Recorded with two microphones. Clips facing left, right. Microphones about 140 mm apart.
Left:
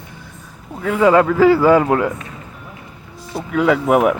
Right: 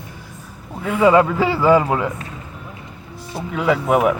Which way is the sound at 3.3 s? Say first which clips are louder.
Left 3 dB; 5° right (ahead or behind).